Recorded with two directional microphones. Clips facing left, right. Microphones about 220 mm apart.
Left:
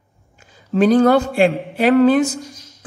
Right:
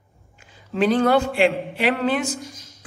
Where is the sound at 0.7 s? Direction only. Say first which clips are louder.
Left 5 dB; 40° left (ahead or behind).